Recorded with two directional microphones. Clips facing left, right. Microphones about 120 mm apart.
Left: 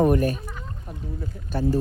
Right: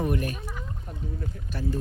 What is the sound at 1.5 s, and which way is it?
Speech, 30° left (ahead or behind).